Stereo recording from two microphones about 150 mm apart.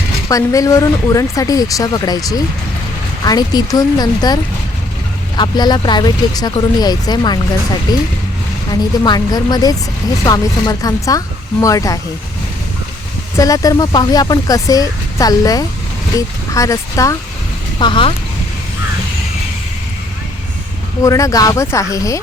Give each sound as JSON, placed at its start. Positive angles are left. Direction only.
{"t": 0.3, "sound": "speech", "side_deg": 20}
{"t": 5.4, "sound": "speech", "side_deg": 30}
{"t": 13.3, "sound": "speech", "side_deg": 25}
{"t": 17.7, "sound": "speech", "side_deg": 30}
{"t": 21.0, "sound": "speech", "side_deg": 20}